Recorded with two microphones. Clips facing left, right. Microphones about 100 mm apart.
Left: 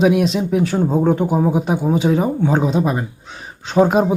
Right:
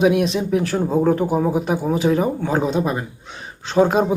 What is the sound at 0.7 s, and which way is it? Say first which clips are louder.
Speech: even; 20° left (ahead or behind).